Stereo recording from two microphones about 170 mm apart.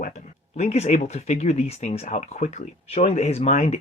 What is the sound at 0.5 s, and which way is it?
Speech, 40° left (ahead or behind).